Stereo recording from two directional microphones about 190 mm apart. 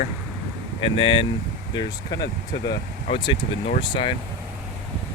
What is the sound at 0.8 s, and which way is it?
Speech, 30° left (ahead or behind).